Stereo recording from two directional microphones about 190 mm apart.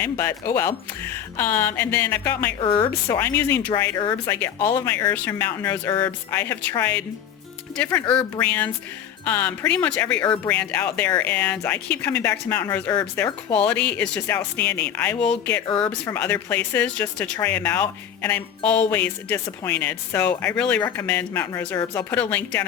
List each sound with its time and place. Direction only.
0.0 s speech: 15° left (ahead or behind)
2.6 s speech: 25° left (ahead or behind)
3.1 s speech: 15° left (ahead or behind)
8.4 s speech: 10° left (ahead or behind)